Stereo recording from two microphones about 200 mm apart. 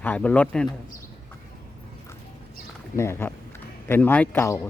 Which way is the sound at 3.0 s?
10° left (ahead or behind).